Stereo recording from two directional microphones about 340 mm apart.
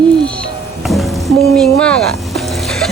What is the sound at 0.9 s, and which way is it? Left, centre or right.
Music, centre.